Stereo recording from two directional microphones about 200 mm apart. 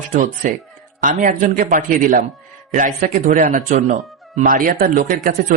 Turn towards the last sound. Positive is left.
turn(degrees=-40)  # may be behind; listen again after turning